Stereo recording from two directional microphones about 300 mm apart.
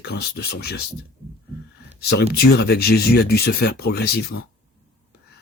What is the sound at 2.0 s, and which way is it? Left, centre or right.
Speech, left.